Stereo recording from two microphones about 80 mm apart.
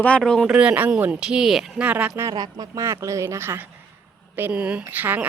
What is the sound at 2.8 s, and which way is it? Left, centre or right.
Speech, right.